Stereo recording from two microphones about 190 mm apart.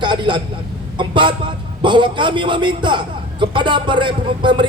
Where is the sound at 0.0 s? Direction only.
25° right (ahead or behind).